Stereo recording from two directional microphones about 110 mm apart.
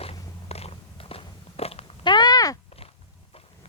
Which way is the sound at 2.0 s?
40° left (ahead or behind).